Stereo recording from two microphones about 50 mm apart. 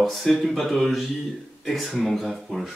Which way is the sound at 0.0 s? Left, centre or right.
Centre.